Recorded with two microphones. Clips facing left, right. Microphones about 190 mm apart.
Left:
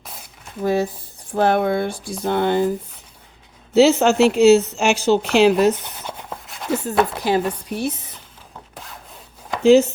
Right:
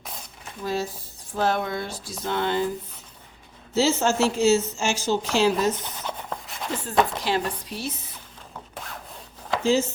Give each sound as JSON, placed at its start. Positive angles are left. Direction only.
{"t": 0.6, "sound": "a woman's voice", "side_deg": 55}
{"t": 3.8, "sound": "a woman's voice", "side_deg": 65}
{"t": 6.1, "sound": "a sound", "side_deg": 5}
{"t": 7.2, "sound": "speech", "side_deg": 50}
{"t": 9.6, "sound": "a woman's voice", "side_deg": 65}